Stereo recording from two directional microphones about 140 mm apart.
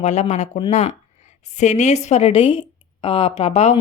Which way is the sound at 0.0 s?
55° left (ahead or behind).